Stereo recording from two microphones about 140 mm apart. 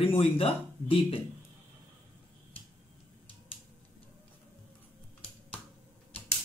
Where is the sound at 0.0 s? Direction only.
45° left (ahead or behind).